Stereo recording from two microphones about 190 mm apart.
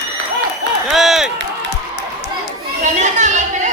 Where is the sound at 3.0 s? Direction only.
40° right (ahead or behind).